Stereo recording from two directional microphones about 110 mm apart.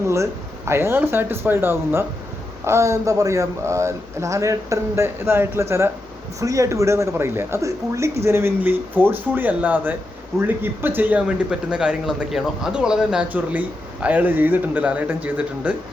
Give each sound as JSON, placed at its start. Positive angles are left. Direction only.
{"t": 0.1, "sound": "speech", "side_deg": -25}
{"t": 11.2, "sound": "speech", "side_deg": -5}